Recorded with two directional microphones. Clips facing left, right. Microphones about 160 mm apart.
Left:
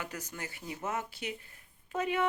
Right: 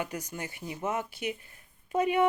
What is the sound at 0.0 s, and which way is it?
Speech, 15° right (ahead or behind).